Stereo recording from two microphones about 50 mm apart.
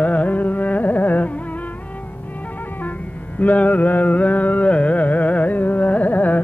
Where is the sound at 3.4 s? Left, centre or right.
Left.